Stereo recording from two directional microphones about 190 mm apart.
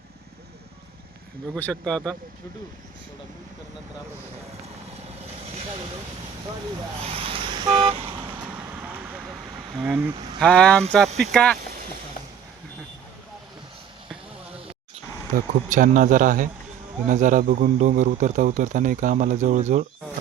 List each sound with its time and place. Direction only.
1.5 s speech: 5° left (ahead or behind)
7.0 s vehicle: 30° right (ahead or behind)
8.4 s vehicle: 5° right (ahead or behind)
9.7 s speech: 5° right (ahead or behind)
10.4 s speech: 5° left (ahead or behind)
15.3 s speech: 45° right (ahead or behind)